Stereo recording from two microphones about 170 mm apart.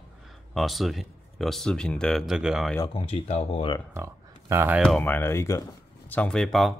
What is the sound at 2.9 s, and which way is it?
Speech, 35° left (ahead or behind).